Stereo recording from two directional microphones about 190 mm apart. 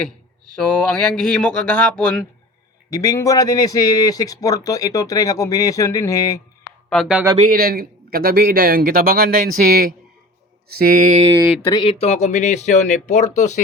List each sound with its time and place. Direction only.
0.5 s speech: 5° left (ahead or behind)
2.9 s a man's voice: 15° left (ahead or behind)
6.9 s speech: centre (ahead or behind)
7.3 s a man's voice: 45° right (ahead or behind)
11.6 s speech: 25° left (ahead or behind)